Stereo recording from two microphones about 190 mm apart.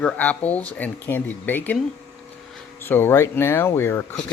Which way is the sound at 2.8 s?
10° left (ahead or behind).